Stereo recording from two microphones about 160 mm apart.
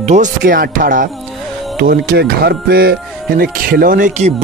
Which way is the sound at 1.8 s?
70° right (ahead or behind).